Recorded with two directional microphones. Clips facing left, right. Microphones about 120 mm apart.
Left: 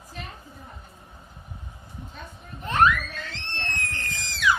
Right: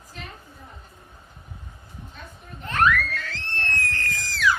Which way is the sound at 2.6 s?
20° left (ahead or behind).